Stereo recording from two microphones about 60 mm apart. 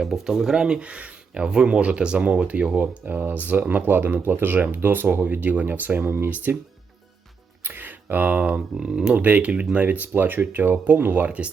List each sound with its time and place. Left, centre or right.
0.0 s speech: centre; by 6.6 s right
7.6 s speech: right; by 9.1 s centre
9.1 s speech: right